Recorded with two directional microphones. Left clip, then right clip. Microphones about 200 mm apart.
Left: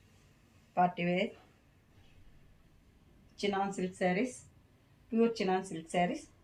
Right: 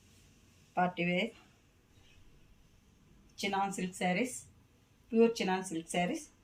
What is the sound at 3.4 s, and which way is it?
Speech, 10° left (ahead or behind).